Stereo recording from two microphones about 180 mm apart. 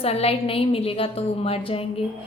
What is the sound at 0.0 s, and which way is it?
A woman's voice, 35° left (ahead or behind).